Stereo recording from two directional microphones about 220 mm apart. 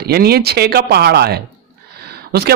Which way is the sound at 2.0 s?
45° right (ahead or behind).